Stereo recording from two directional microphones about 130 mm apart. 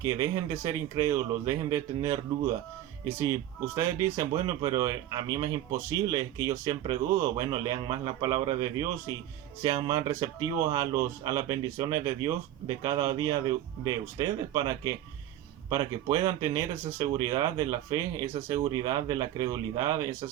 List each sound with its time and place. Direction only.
0.0 s speech: 25° right (ahead or behind)